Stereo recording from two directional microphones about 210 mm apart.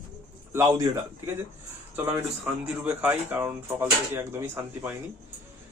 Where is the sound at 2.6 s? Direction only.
5° right (ahead or behind).